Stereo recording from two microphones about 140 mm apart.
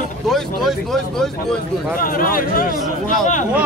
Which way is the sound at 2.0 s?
90° left.